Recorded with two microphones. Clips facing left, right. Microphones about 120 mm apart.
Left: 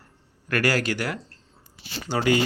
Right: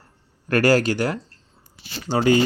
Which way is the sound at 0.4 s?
30° right (ahead or behind).